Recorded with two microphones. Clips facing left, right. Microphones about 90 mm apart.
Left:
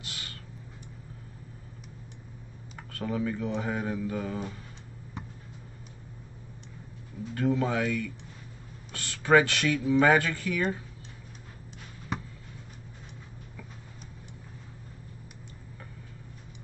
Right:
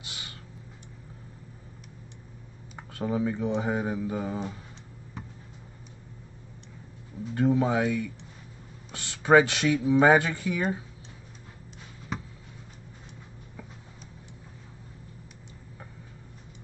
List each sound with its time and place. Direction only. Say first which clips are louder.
0.0 s a sound: left 1 dB; 20° right (ahead or behind)
2.7 s speech: right 3 dB; 20° right (ahead or behind)
7.3 s speech: right 3 dB; 20° right (ahead or behind)